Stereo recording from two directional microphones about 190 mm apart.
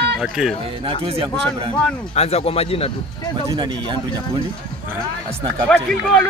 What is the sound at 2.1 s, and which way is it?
Speech, 35° left (ahead or behind).